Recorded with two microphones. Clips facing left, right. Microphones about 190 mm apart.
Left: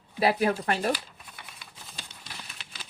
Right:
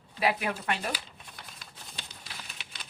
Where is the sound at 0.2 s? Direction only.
35° left (ahead or behind).